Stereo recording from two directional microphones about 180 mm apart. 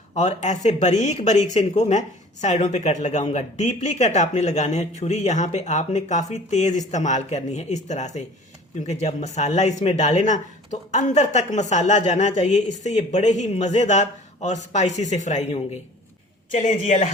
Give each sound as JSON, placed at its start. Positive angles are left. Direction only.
{"t": 0.2, "sound": "speech", "side_deg": 40}